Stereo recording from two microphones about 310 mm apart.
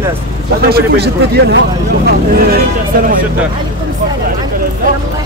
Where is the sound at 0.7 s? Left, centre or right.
Right.